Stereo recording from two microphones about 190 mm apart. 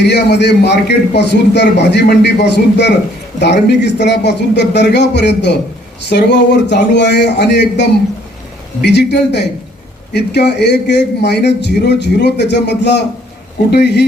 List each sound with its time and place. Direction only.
0.0 s a man's voice: 65° left (ahead or behind)